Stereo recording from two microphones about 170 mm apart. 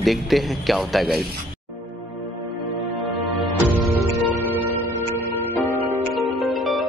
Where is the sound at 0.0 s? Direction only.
Centre (ahead or behind).